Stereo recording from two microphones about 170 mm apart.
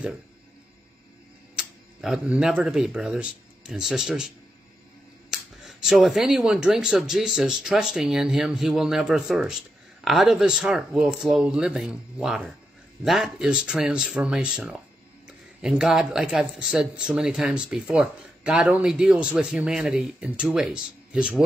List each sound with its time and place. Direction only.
1.5 s speech: 5° right (ahead or behind)
5.3 s speech: centre (ahead or behind)